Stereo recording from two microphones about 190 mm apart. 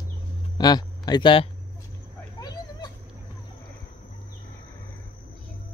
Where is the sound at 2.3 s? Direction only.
20° left (ahead or behind).